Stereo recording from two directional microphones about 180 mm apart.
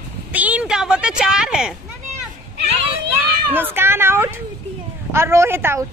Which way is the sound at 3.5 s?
10° right (ahead or behind).